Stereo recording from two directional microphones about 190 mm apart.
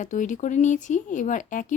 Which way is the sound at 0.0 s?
40° left (ahead or behind).